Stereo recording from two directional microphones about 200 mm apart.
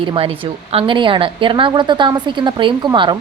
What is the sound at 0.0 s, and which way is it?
A woman's voice, 25° right (ahead or behind).